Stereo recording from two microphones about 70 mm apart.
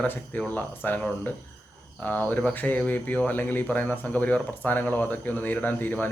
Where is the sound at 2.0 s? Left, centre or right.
Left.